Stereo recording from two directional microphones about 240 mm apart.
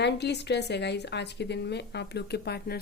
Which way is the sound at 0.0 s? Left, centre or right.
Left.